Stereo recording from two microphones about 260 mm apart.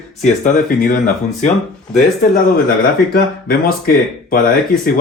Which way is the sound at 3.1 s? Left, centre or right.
Left.